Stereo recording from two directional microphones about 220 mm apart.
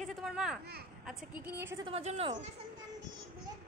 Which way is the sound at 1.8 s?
25° right (ahead or behind).